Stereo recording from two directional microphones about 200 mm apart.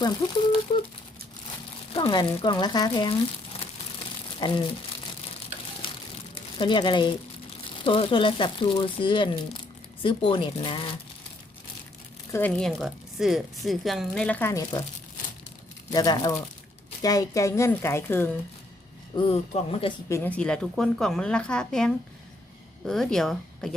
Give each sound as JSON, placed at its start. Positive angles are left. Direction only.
{"t": 0.2, "sound": "speech", "side_deg": 30}
{"t": 1.9, "sound": "speech", "side_deg": 25}
{"t": 4.4, "sound": "speech", "side_deg": 25}
{"t": 5.8, "sound": "a sound", "side_deg": 25}
{"t": 6.3, "sound": "speech", "side_deg": 25}
{"t": 12.3, "sound": "speech", "side_deg": 5}
{"t": 15.9, "sound": "a woman's voice", "side_deg": 20}
{"t": 19.1, "sound": "speech", "side_deg": 25}
{"t": 20.1, "sound": "speech", "side_deg": 10}